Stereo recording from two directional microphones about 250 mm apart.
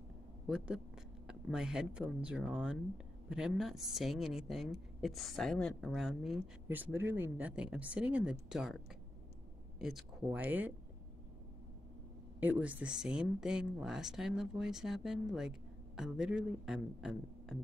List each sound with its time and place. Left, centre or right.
1.2 s a woman's voice: centre
9.8 s speech: centre
12.4 s a woman's voice: centre